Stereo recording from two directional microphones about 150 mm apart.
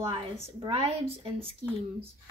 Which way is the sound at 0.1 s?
40° right (ahead or behind).